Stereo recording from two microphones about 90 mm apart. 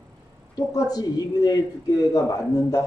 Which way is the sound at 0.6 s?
40° left (ahead or behind).